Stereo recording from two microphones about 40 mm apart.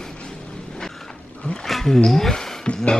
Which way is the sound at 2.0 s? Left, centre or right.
Centre.